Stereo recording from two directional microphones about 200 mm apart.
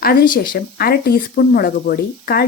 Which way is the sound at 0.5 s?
50° left (ahead or behind).